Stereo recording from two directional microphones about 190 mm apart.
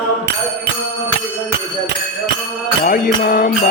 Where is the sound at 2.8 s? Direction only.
50° left (ahead or behind).